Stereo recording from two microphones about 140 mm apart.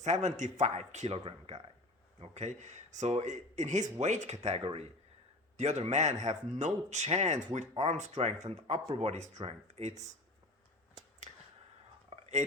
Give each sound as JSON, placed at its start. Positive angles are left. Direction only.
{"t": 0.0, "sound": "speech", "side_deg": -55}
{"t": 2.2, "sound": "speech", "side_deg": -55}
{"t": 5.5, "sound": "speech", "side_deg": -55}
{"t": 9.4, "sound": "speech", "side_deg": -45}
{"t": 11.3, "sound": "a sound", "side_deg": -35}
{"t": 12.1, "sound": "whispering", "side_deg": -50}